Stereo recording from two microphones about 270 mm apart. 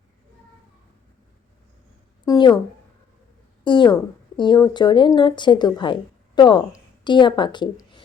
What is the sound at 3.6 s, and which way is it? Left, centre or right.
A woman's voice, centre.